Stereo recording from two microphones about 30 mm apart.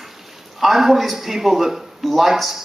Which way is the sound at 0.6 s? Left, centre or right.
Centre.